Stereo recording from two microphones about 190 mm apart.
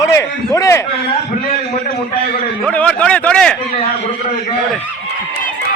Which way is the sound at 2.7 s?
5° left (ahead or behind).